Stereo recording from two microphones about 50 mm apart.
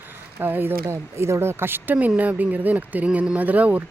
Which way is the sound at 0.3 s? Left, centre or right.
Right.